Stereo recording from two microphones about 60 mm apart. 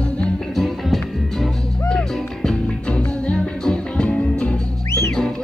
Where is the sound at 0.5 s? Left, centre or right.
Centre.